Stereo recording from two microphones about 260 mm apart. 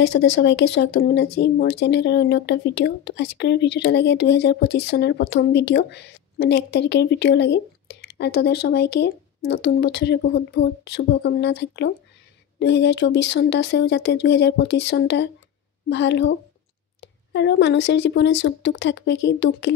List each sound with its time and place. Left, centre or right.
0.0 s speech: left